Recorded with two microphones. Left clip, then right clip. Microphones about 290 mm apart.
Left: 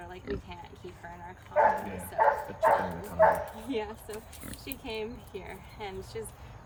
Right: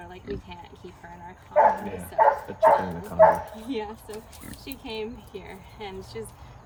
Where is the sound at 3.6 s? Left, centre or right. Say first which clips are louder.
Right 2 dB; centre.